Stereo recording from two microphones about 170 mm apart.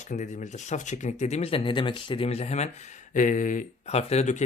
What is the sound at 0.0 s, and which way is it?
Speech, 45° left (ahead or behind).